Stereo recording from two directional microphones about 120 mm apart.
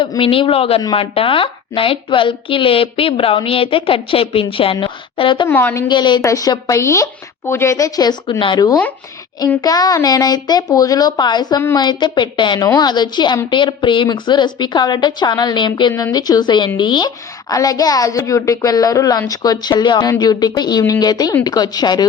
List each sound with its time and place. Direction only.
0.2 s a woman's voice: 50° left (ahead or behind)
5.5 s a woman's voice: 15° left (ahead or behind)
5.9 s a woman's voice: 40° left (ahead or behind)